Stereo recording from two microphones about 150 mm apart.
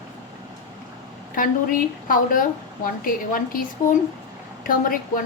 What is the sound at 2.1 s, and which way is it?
A woman's voice, 65° left (ahead or behind).